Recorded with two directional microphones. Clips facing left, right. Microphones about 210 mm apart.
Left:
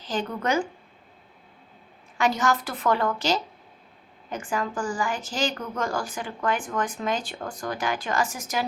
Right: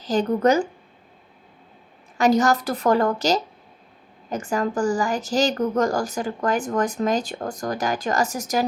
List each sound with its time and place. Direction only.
0.0 s speech: 40° right (ahead or behind)
2.1 s speech: 40° right (ahead or behind)